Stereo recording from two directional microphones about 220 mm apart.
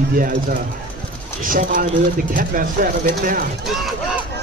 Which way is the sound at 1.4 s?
40° right (ahead or behind).